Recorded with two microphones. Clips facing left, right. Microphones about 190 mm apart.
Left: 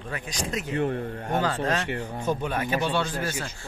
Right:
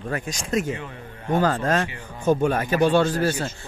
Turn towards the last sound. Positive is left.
turn(degrees=-35)  # may be behind; listen again after turning